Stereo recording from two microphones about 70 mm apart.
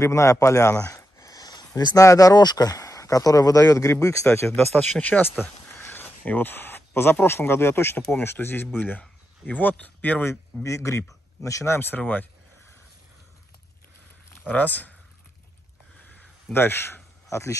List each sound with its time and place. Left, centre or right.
0.0 s speech: left
0.8 s a sound: left
2.0 s speech: left
4.6 s speech: centre
5.0 s speech: left
10.6 s speech: left
12.0 s speech: left
14.4 s speech: left
16.5 s speech: left